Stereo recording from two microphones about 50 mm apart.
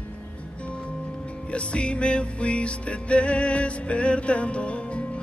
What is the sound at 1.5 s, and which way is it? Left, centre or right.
Music, left.